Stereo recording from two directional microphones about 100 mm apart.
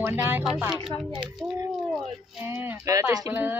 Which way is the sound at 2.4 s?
20° right (ahead or behind).